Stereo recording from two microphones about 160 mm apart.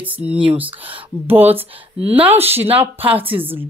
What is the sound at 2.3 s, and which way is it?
Speech, 40° right (ahead or behind).